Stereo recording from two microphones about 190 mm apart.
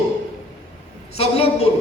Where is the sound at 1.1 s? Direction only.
35° left (ahead or behind).